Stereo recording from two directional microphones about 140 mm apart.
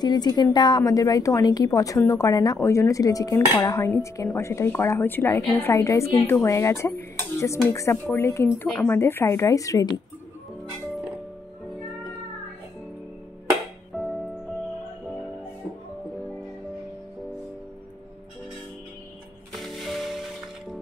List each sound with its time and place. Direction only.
0.0 s a woman's voice: 30° left (ahead or behind)
13.9 s music: centre (ahead or behind)
19.6 s music: centre (ahead or behind)